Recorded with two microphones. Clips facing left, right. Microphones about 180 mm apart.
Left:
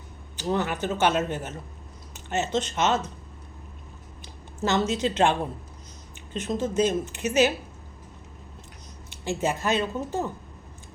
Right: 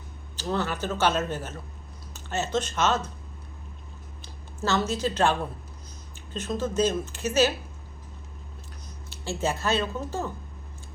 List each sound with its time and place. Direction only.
0.3 s speech: 15° left (ahead or behind)
4.6 s speech: 20° left (ahead or behind)
9.0 s speech: 15° left (ahead or behind)